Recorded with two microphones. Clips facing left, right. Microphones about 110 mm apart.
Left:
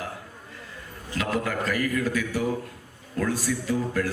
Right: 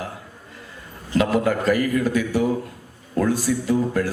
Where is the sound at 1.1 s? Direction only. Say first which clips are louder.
Right 8 dB; 25° right (ahead or behind).